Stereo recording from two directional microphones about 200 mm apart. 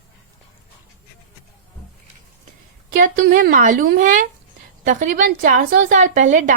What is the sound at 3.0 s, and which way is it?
A woman's voice, 45° right (ahead or behind).